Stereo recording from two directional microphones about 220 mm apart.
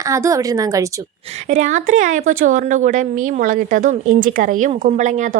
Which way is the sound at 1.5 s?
35° right (ahead or behind).